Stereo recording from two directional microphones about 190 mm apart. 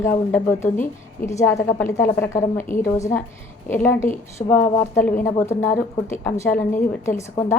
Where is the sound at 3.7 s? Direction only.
10° left (ahead or behind).